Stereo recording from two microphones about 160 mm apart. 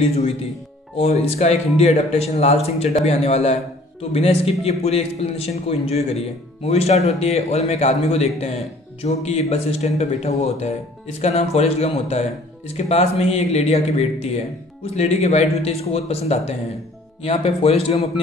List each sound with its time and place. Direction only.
0.9 s a man's voice: 45° left (ahead or behind)